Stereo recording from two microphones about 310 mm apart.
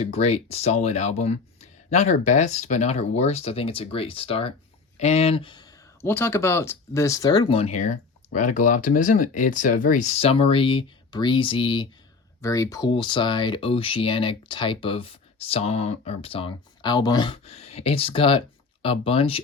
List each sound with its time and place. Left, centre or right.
0.0 s speech: centre